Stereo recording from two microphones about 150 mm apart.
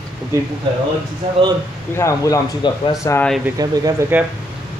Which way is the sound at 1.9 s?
20° left (ahead or behind).